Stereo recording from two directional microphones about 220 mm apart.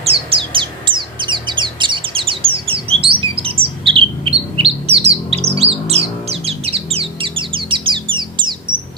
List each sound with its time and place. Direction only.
0.0 s bird: 25° right (ahead or behind)